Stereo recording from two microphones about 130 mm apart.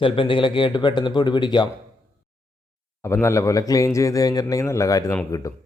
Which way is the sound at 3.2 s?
25° left (ahead or behind).